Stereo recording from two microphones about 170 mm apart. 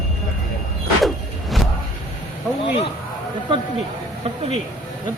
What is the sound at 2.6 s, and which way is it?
Speech, 35° left (ahead or behind).